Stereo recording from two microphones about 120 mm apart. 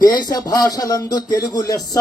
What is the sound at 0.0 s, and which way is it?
Music, 35° left (ahead or behind).